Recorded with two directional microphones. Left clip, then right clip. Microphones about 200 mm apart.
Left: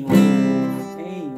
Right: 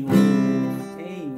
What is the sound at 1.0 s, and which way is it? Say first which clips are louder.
Music: left 3 dB; centre (ahead or behind).